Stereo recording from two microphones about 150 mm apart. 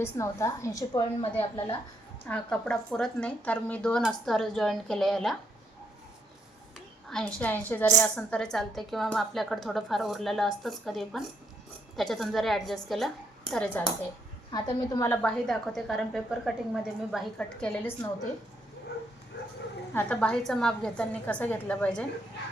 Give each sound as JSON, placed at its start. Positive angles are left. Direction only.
{"t": 0.0, "sound": "a woman's voice", "side_deg": 20}
{"t": 1.2, "sound": "a woman's voice", "side_deg": 40}
{"t": 2.2, "sound": "a woman's voice", "side_deg": 5}
{"t": 7.3, "sound": "a woman's voice", "side_deg": 10}
{"t": 14.5, "sound": "a woman's voice", "side_deg": 30}
{"t": 15.1, "sound": "a woman's voice", "side_deg": 10}
{"t": 19.9, "sound": "a woman's voice", "side_deg": 10}